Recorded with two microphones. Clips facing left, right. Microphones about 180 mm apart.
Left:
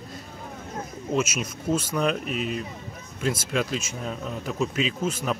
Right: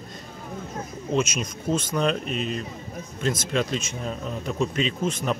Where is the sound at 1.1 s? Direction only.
5° left (ahead or behind).